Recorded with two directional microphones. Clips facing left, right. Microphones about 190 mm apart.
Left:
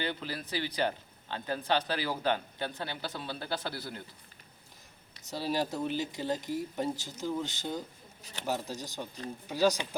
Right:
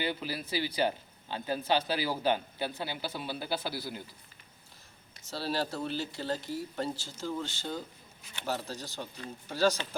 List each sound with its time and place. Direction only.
0.0 s speech: 10° right (ahead or behind)
5.3 s speech: 15° left (ahead or behind)
8.2 s speech: 40° left (ahead or behind)
8.4 s speech: 15° left (ahead or behind)